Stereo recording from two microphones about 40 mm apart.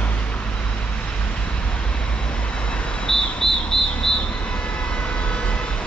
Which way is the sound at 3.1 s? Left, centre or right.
Centre.